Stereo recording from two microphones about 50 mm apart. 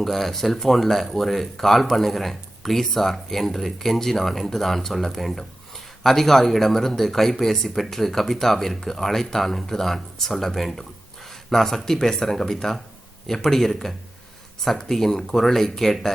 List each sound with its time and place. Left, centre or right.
0.0 s speech: centre